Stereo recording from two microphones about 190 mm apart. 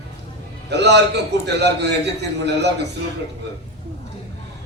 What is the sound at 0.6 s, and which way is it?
A man's voice, 65° right (ahead or behind).